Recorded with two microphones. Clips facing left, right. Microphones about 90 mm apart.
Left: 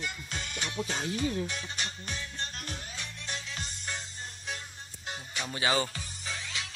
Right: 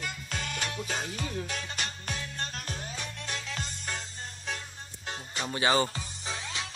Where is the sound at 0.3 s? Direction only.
45° right (ahead or behind).